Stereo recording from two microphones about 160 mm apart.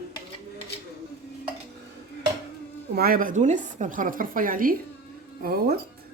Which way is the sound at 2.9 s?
70° right (ahead or behind).